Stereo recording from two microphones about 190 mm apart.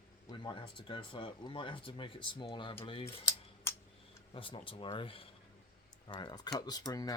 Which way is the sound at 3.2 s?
15° left (ahead or behind).